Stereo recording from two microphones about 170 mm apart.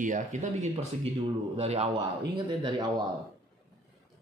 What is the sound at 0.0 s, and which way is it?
A man's voice, 45° right (ahead or behind).